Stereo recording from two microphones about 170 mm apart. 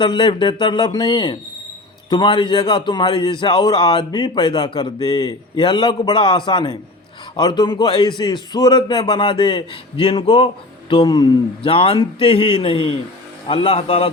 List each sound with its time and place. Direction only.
0.0 s a man's voice: 30° left (ahead or behind)